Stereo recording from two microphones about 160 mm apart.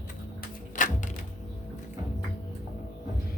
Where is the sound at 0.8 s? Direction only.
50° left (ahead or behind).